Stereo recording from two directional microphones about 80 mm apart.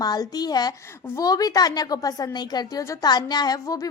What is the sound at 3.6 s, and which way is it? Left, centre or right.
Speech, left.